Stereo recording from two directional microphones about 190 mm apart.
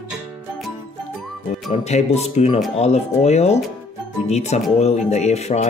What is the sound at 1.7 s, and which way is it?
Music, 35° left (ahead or behind).